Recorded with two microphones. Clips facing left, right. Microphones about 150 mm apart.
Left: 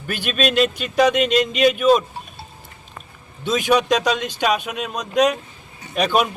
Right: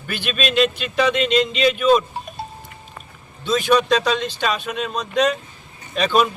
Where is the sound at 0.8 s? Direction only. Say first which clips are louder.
Left 2 dB; 45° left (ahead or behind).